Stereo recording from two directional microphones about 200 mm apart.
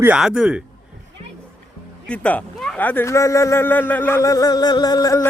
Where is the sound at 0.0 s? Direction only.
5° right (ahead or behind).